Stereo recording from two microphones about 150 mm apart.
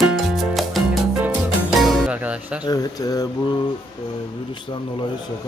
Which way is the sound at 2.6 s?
25° left (ahead or behind).